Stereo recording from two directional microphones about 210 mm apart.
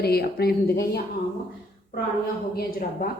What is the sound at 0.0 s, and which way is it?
Speech, 50° left (ahead or behind).